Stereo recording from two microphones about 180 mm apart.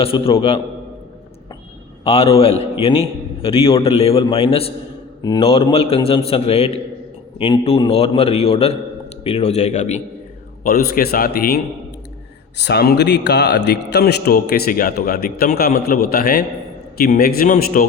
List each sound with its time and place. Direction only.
0.0 s a man's voice: 30° left (ahead or behind)
2.0 s a man's voice: 35° left (ahead or behind)
10.6 s speech: 55° left (ahead or behind)
12.6 s a man's voice: 60° left (ahead or behind)